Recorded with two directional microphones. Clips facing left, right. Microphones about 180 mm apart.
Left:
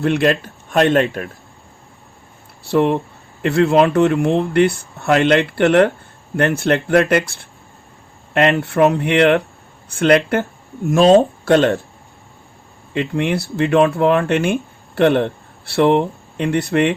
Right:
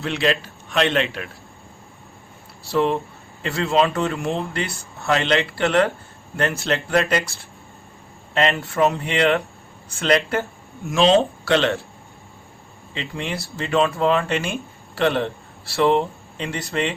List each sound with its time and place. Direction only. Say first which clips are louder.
0.0 s a man's voice: left 6 dB; 55° left (ahead or behind)
2.6 s a man's voice: left 5 dB; 60° left (ahead or behind)
12.9 s speech: left 10 dB; 55° left (ahead or behind)